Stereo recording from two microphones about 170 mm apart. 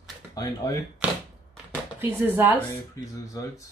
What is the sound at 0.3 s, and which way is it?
Speech, 20° left (ahead or behind).